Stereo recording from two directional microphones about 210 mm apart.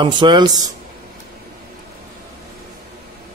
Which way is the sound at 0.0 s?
20° right (ahead or behind).